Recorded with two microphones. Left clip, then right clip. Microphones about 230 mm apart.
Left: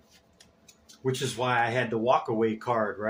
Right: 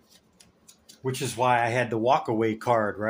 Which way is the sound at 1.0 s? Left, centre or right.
Right.